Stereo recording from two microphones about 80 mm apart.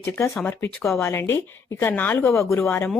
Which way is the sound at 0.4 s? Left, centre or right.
Left.